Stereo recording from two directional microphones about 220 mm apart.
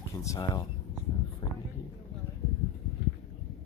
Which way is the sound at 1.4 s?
20° left (ahead or behind).